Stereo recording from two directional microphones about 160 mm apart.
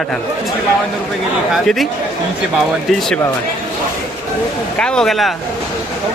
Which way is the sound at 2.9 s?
Centre (ahead or behind).